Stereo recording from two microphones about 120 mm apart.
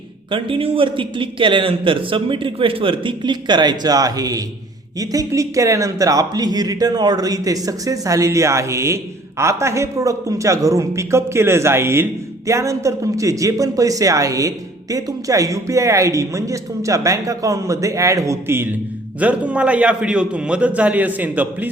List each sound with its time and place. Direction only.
0.3 s a man's voice: 45° right (ahead or behind); by 21.7 s 15° right (ahead or behind)